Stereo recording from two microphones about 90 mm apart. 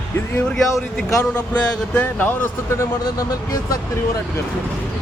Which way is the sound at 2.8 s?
40° left (ahead or behind).